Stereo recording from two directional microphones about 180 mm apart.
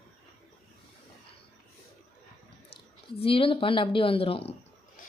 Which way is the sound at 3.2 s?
30° left (ahead or behind).